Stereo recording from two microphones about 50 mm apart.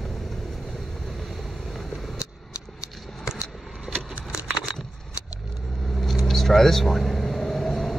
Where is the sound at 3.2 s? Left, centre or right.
Centre.